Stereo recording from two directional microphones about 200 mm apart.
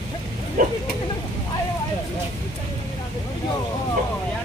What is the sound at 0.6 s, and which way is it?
Speech, 45° right (ahead or behind).